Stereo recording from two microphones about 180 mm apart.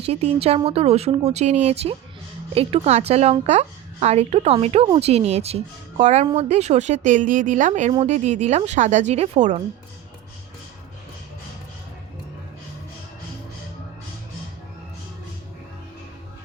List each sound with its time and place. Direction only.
0.0 s a woman's voice: 35° right (ahead or behind)